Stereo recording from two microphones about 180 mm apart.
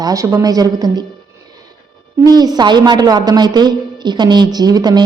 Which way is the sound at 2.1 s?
20° right (ahead or behind).